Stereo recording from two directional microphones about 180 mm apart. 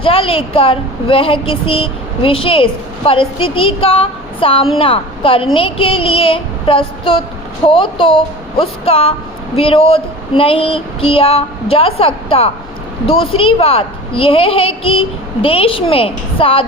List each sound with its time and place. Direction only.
0.0 s a woman's voice: 30° left (ahead or behind)
5.5 s child singing: 30° left (ahead or behind)
9.6 s a woman's voice: 30° left (ahead or behind)